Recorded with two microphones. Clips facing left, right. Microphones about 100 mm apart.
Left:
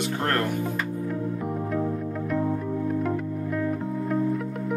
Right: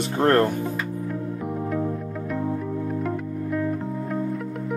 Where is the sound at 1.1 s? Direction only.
Centre (ahead or behind).